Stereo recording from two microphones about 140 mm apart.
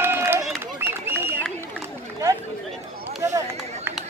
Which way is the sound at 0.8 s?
15° right (ahead or behind).